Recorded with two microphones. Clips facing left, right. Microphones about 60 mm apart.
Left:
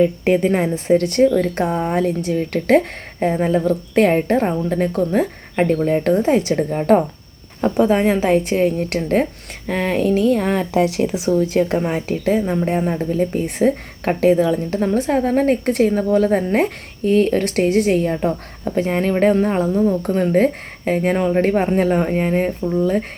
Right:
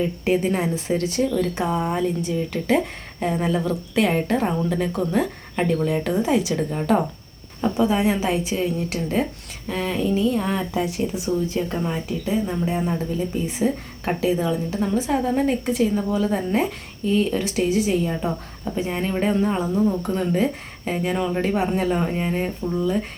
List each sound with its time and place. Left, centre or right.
0.0 s a woman's voice: left
3.2 s speech: left
10.8 s speech: left
11.3 s a woman's voice: left
11.8 s a woman's voice: left
12.6 s a woman's voice: left
14.9 s a woman's voice: left
19.7 s speech: centre
20.0 s speech: left